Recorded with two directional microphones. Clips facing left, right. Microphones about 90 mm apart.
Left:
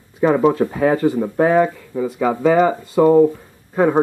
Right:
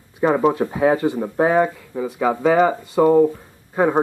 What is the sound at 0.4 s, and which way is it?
Speech, 15° right (ahead or behind).